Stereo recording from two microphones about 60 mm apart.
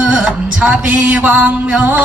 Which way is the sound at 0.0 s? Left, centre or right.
Centre.